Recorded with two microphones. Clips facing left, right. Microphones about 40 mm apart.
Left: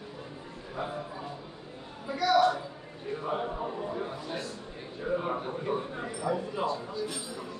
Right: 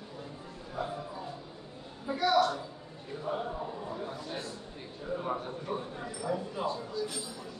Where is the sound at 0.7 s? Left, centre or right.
Centre.